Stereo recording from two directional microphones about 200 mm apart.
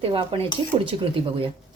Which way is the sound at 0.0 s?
25° right (ahead or behind).